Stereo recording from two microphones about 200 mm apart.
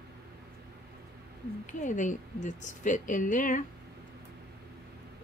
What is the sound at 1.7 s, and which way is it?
A woman's voice, 40° left (ahead or behind).